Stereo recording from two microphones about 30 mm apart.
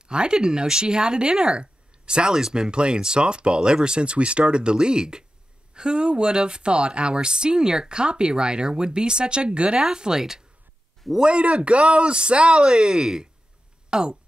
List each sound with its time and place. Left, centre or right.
0.1 s speech: right
1.6 s a sound: right
2.3 s speech: right
9.9 s speech: right
11.2 s speech: right
12.6 s speech: right